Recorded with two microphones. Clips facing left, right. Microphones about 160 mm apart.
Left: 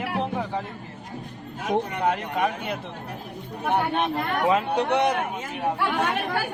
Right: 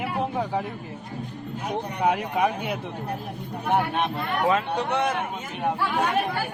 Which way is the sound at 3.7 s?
Centre (ahead or behind).